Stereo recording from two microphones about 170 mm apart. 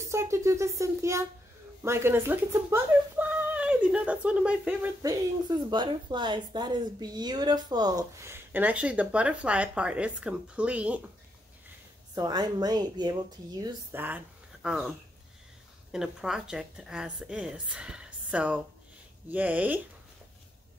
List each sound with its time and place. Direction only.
0.0 s speech: 15° right (ahead or behind)
5.0 s speech: 25° right (ahead or behind); by 11.0 s 5° right (ahead or behind)
12.2 s speech: 25° right (ahead or behind)
13.9 s speech: 10° right (ahead or behind)
15.9 s a woman's voice: 5° right (ahead or behind)